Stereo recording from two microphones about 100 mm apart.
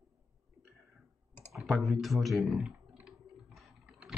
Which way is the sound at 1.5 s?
Centre (ahead or behind).